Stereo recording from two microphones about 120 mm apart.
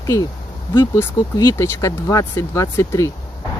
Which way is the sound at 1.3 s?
25° left (ahead or behind).